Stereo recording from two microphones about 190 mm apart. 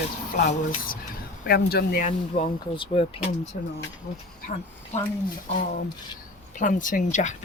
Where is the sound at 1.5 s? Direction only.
55° left (ahead or behind).